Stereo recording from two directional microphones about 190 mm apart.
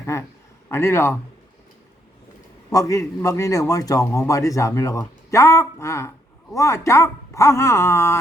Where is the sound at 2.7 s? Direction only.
15° left (ahead or behind).